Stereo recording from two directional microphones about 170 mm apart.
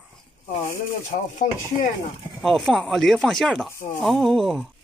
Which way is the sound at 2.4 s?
Centre (ahead or behind).